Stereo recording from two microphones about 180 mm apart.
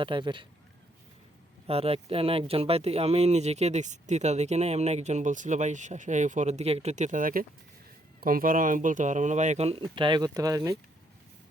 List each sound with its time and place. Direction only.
0.0 s speech: 25° right (ahead or behind)
1.6 s speech: 35° right (ahead or behind)